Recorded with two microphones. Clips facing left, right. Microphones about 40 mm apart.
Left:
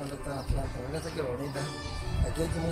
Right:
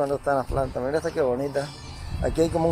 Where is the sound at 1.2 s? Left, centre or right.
Right.